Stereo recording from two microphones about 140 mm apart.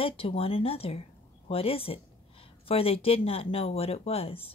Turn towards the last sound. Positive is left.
turn(degrees=45)  # may be behind; listen again after turning